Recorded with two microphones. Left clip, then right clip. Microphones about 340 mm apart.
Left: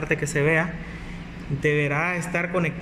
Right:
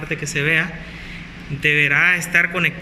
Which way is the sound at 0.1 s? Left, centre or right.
Left.